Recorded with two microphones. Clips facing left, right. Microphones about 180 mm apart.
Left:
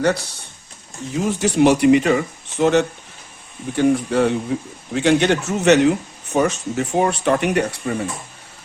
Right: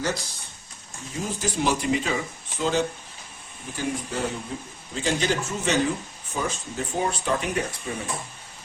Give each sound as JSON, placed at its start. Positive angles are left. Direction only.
{"t": 0.0, "sound": "speech", "side_deg": 65}